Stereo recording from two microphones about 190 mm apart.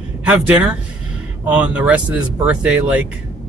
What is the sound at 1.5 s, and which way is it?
A man's voice, 5° right (ahead or behind).